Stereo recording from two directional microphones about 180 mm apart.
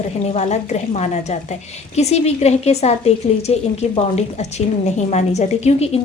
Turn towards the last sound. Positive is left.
turn(degrees=35)  # may be behind; listen again after turning